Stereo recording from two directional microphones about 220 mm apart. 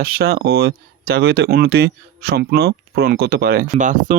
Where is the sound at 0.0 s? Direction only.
45° right (ahead or behind).